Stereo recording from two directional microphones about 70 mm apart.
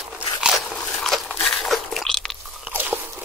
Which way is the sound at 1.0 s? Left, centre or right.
Centre.